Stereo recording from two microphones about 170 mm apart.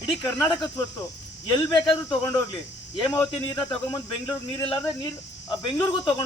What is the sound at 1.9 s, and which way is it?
Speech, 30° left (ahead or behind).